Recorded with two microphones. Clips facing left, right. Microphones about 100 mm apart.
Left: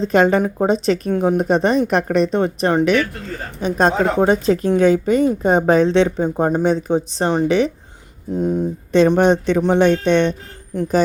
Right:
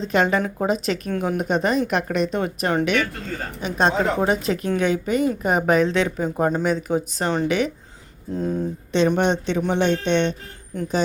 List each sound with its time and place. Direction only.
0.1 s speech: 35° left (ahead or behind)
8.3 s speech: 15° left (ahead or behind)
8.9 s speech: 40° left (ahead or behind)